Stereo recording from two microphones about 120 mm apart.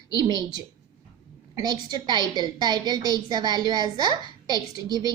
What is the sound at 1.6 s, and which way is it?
A woman's voice, 35° right (ahead or behind).